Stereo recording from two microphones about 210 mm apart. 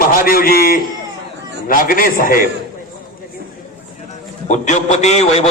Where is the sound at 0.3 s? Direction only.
45° left (ahead or behind).